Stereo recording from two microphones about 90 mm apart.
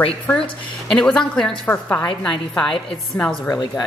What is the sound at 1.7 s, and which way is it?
Speech, 20° left (ahead or behind).